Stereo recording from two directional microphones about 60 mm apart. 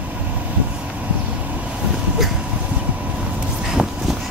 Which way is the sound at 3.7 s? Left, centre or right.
Centre.